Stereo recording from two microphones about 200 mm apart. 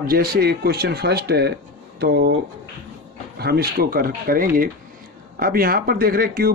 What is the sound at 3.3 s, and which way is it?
Speech, 55° right (ahead or behind).